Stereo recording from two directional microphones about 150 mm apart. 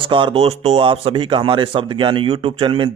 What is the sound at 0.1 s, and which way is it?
Speech, 35° right (ahead or behind).